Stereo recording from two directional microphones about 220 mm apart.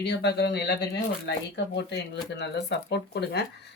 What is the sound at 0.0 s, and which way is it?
Speech, 50° left (ahead or behind).